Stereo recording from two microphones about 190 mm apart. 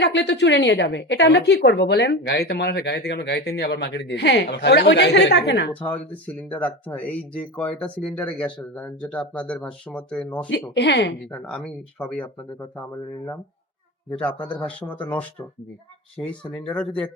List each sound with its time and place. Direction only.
0.0 s a woman's voice: 70° left (ahead or behind)
5.8 s speech: 10° left (ahead or behind)
10.8 s a woman's voice: 65° left (ahead or behind)
11.3 s speech: 5° left (ahead or behind)
14.4 s speech: 5° left (ahead or behind)